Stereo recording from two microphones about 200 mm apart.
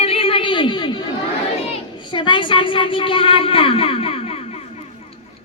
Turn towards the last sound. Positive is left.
turn(degrees=30)  # may be behind; listen again after turning